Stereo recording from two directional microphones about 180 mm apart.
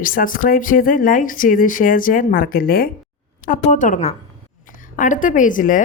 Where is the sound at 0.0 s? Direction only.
50° left (ahead or behind).